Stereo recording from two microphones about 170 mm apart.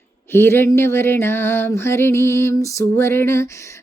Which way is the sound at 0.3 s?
15° left (ahead or behind).